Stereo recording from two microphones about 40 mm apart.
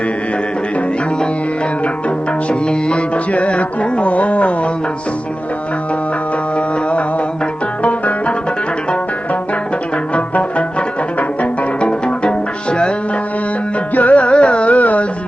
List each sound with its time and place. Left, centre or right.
2.0 s music: left
7.8 s banjo: left
10.2 s music: left
11.8 s music: left
13.9 s music: left